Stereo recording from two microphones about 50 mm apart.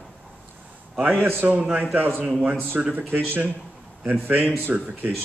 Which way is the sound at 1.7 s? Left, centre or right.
Right.